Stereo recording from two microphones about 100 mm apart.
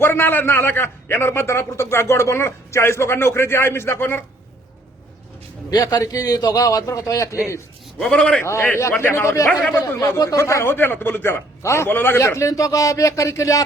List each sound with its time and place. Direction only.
0.0 s a man's voice: 20° left (ahead or behind)
5.7 s a man's voice: 35° left (ahead or behind)
7.9 s a man's voice: 10° left (ahead or behind)
8.4 s a man's voice: 30° left (ahead or behind)
9.8 s a man's voice: 35° left (ahead or behind)